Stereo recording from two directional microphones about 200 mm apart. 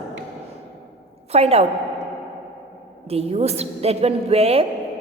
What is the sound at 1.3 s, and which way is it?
Speech, 30° right (ahead or behind).